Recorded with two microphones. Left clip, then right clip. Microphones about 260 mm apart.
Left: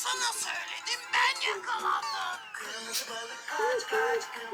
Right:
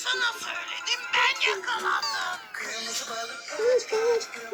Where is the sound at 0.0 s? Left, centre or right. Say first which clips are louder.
Right 5 dB; centre.